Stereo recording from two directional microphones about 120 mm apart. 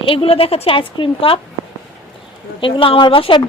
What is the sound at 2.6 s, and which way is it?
Speech, 45° left (ahead or behind).